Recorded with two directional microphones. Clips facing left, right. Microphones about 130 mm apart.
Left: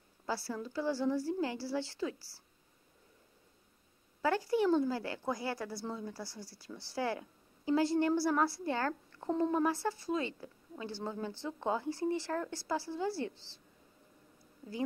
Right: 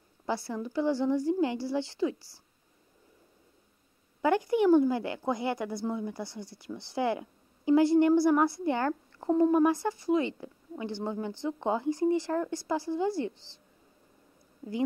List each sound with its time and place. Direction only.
0.3 s speech: 20° right (ahead or behind)
4.2 s speech: 20° right (ahead or behind)